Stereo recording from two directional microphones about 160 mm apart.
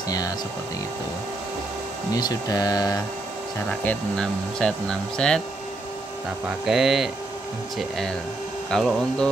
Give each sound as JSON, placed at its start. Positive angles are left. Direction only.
{"t": 2.1, "sound": "speech", "side_deg": 25}
{"t": 3.5, "sound": "speech", "side_deg": 10}
{"t": 6.6, "sound": "speech", "side_deg": 0}
{"t": 8.6, "sound": "speech", "side_deg": 5}